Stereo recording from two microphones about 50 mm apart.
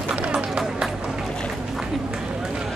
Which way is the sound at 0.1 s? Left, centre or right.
Centre.